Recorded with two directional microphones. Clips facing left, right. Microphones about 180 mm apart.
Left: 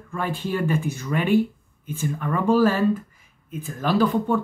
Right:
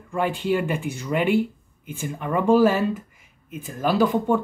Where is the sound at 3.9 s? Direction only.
15° right (ahead or behind).